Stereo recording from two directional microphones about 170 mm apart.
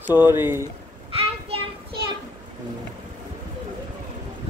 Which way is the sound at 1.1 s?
35° right (ahead or behind).